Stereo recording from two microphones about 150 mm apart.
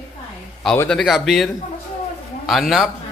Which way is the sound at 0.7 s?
10° left (ahead or behind).